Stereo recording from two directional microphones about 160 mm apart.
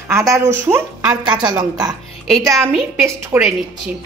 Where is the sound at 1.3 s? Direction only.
25° right (ahead or behind).